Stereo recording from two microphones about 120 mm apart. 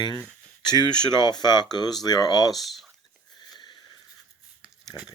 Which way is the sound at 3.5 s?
40° left (ahead or behind).